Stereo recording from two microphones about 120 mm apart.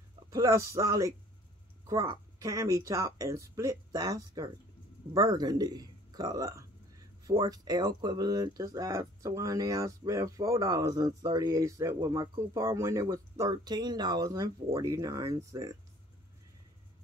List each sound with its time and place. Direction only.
0.3 s speech: 25° right (ahead or behind)
2.3 s speech: 25° right (ahead or behind)